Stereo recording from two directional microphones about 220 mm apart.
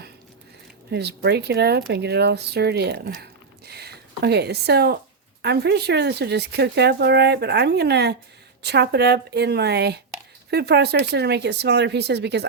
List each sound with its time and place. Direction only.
0.9 s speech: 50° right (ahead or behind)
3.7 s a sound: 45° right (ahead or behind)
5.4 s speech: 50° right (ahead or behind)